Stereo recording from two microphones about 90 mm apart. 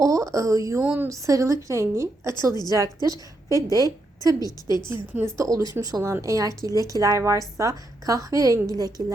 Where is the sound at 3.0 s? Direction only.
40° right (ahead or behind).